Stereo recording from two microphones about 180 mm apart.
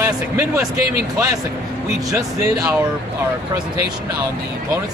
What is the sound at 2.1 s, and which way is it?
Speech, 20° right (ahead or behind).